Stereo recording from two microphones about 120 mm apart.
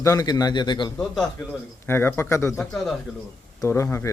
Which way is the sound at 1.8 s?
20° left (ahead or behind).